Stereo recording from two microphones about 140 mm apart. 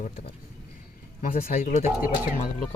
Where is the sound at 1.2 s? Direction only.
70° left (ahead or behind).